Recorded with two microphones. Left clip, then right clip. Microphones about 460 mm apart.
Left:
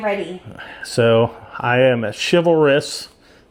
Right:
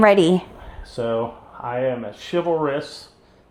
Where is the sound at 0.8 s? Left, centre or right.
Left.